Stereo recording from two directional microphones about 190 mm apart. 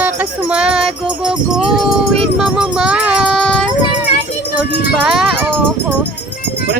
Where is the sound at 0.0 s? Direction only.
10° right (ahead or behind).